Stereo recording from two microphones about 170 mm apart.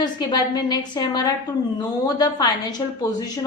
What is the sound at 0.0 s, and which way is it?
A woman's voice, 25° left (ahead or behind).